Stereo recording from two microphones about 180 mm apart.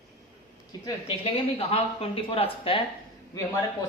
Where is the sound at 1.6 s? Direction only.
35° left (ahead or behind).